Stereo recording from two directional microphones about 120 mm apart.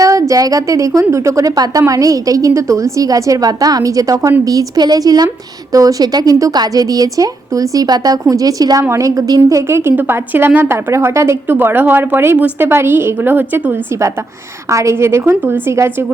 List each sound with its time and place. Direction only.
0.0 s a woman's voice: 30° right (ahead or behind)